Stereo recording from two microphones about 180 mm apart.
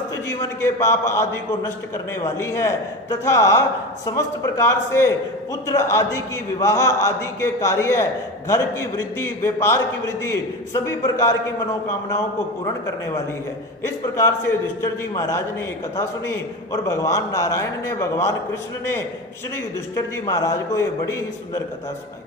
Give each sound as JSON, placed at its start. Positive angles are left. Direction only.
{"t": 0.3, "sound": "a man's voice", "side_deg": 15}
{"t": 13.8, "sound": "a man's voice", "side_deg": 15}
{"t": 20.0, "sound": "a man's voice", "side_deg": 20}